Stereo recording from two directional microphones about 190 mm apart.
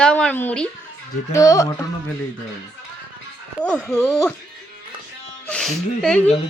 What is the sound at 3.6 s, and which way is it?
Speech, 5° left (ahead or behind).